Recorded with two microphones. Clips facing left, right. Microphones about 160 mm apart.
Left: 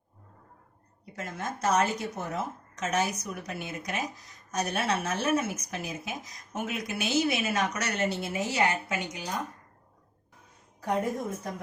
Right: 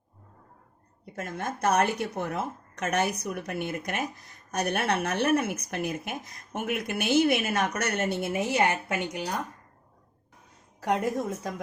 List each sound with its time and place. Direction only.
1.1 s a woman's voice: 55° right (ahead or behind)
10.8 s a woman's voice: 85° right